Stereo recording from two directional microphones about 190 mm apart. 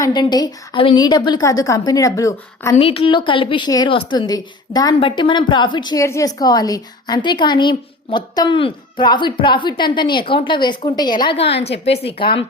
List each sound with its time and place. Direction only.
0.0 s a woman's voice: 20° left (ahead or behind)
2.7 s a woman's voice: 30° left (ahead or behind)